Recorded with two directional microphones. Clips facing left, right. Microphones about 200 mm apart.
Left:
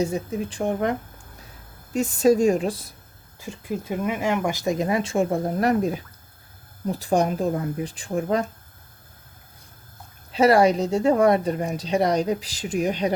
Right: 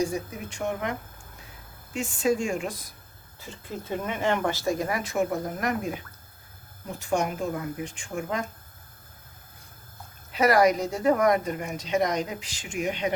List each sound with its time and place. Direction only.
0.0 s speech: 30° left (ahead or behind)
3.4 s speech: 10° left (ahead or behind); by 8.4 s 35° left (ahead or behind)
10.3 s speech: 30° left (ahead or behind)